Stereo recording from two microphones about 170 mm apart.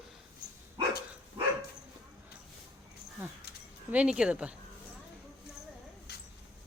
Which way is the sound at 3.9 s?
5° right (ahead or behind).